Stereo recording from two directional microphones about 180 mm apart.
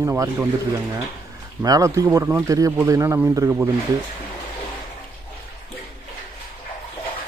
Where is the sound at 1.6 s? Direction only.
20° right (ahead or behind).